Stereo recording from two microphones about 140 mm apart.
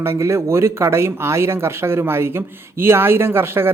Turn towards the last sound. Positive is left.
turn(degrees=-15)  # may be behind; listen again after turning